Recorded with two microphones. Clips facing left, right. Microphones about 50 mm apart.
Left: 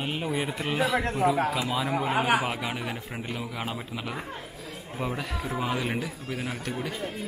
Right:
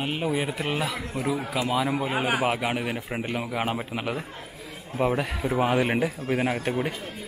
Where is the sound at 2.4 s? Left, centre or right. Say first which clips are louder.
Right 5 dB; centre.